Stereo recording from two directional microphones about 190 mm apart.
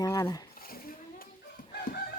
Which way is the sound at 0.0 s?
20° left (ahead or behind).